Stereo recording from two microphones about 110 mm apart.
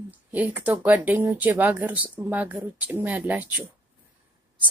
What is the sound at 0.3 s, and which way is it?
A woman's voice, 15° right (ahead or behind).